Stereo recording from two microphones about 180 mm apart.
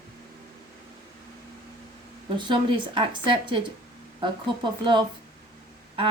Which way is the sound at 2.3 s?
25° right (ahead or behind).